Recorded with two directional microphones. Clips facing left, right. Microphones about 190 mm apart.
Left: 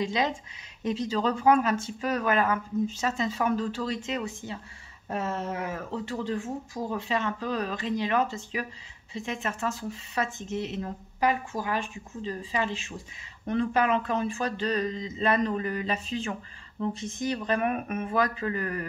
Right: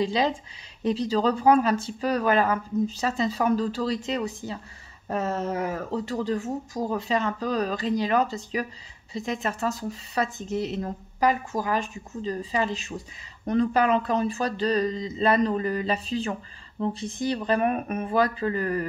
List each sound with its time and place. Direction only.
0.0 s speech: 35° right (ahead or behind)